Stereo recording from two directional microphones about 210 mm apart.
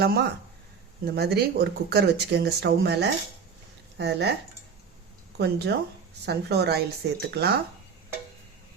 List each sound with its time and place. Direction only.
0.0 s speech: 50° right (ahead or behind)
5.4 s speech: 50° right (ahead or behind)